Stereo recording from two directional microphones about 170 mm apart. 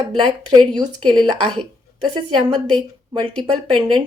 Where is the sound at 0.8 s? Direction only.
25° right (ahead or behind).